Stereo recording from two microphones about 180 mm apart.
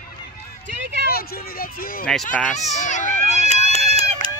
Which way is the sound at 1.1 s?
55° left (ahead or behind).